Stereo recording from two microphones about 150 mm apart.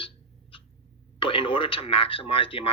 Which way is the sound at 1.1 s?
35° left (ahead or behind).